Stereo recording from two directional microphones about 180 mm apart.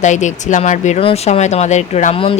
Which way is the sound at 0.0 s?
40° left (ahead or behind).